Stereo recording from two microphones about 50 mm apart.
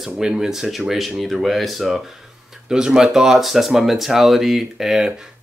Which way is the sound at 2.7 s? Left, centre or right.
Centre.